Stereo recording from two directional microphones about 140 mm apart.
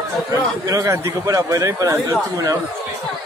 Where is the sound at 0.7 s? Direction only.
25° right (ahead or behind).